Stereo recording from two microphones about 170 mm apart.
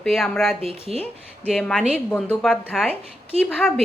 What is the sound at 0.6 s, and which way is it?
Speech, 35° right (ahead or behind).